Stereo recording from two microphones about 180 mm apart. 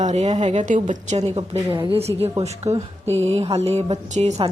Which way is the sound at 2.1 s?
25° right (ahead or behind).